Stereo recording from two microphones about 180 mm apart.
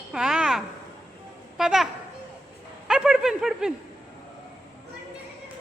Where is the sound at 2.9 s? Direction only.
5° right (ahead or behind).